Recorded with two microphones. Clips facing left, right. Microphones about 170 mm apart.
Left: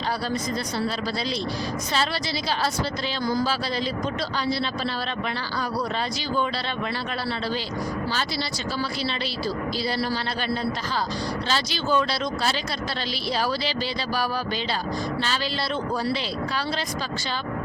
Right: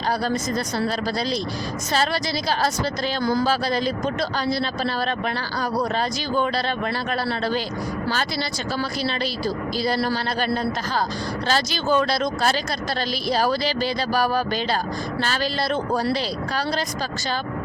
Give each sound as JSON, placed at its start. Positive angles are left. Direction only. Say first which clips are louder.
{"t": 3.2, "sound": "speech", "louder": "right 3 dB", "side_deg": -50}
{"t": 11.4, "sound": "speech", "louder": "right 6 dB", "side_deg": -45}